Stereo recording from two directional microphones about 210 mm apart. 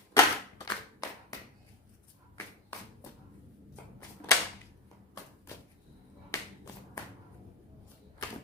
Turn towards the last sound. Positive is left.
turn(degrees=15)  # may be behind; listen again after turning